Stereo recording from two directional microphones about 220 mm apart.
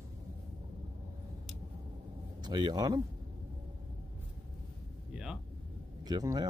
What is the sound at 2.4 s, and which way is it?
Speech, 20° right (ahead or behind).